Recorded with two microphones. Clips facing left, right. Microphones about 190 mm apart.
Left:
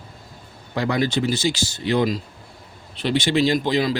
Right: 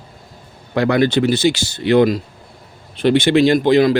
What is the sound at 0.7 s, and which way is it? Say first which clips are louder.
A man's voice: right 7 dB; 65° right (ahead or behind).